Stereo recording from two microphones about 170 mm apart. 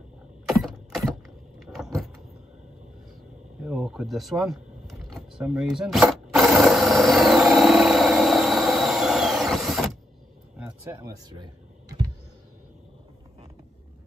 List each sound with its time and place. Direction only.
0.5 s a sound: centre (ahead or behind)
1.6 s vehicle: centre (ahead or behind)
3.6 s vehicle: 5° right (ahead or behind)
5.4 s tools: 5° right (ahead or behind)
10.6 s speech: 15° right (ahead or behind)